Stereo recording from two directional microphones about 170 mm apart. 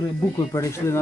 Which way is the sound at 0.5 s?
15° left (ahead or behind).